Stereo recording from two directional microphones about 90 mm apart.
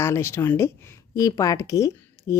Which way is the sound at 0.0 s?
30° left (ahead or behind).